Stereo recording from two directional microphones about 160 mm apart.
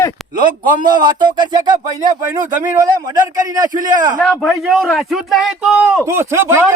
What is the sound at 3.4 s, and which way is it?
Speech, 25° right (ahead or behind).